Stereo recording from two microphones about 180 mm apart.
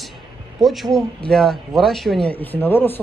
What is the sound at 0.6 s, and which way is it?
Speech, centre (ahead or behind).